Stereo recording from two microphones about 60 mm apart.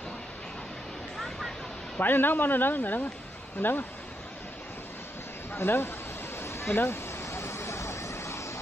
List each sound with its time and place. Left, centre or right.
2.0 s speech: left
5.5 s speech: left
6.4 s vehicle: left